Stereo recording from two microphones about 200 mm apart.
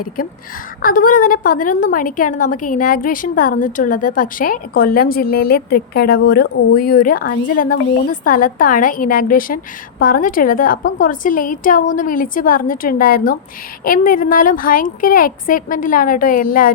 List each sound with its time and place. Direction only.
0.8 s a woman's voice: 45° left (ahead or behind)